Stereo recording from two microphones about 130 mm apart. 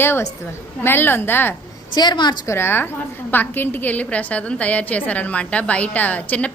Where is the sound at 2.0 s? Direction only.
35° left (ahead or behind).